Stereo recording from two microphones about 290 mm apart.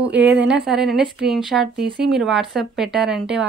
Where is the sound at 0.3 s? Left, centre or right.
Centre.